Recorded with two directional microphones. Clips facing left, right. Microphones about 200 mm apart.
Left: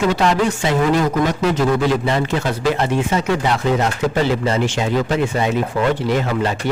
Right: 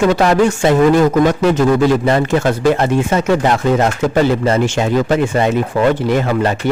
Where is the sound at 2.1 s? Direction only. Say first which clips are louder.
Right 6 dB; 50° right (ahead or behind).